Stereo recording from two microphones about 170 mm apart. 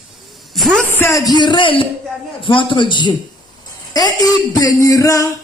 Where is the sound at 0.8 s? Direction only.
15° left (ahead or behind).